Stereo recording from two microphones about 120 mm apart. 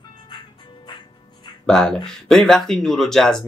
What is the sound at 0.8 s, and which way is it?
Music, 40° left (ahead or behind).